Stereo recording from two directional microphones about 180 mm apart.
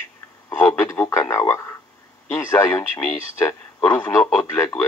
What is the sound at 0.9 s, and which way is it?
Speech, 15° left (ahead or behind).